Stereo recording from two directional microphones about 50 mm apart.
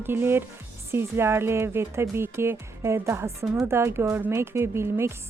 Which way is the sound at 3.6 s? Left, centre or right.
Right.